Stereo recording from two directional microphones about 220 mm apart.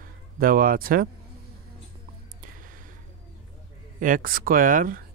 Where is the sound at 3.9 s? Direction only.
40° right (ahead or behind).